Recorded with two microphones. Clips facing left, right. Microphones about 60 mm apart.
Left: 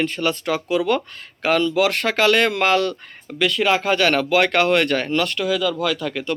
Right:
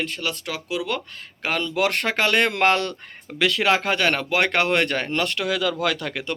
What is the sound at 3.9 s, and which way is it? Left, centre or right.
A man's voice, centre.